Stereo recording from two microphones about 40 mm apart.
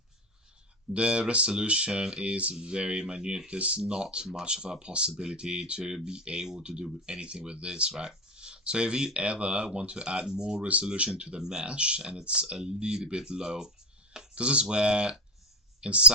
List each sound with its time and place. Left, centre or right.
0.9 s speech: right
11.3 s speech: centre
11.6 s speech: right
14.3 s speech: right